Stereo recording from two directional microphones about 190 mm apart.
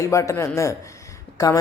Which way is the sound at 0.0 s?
15° left (ahead or behind).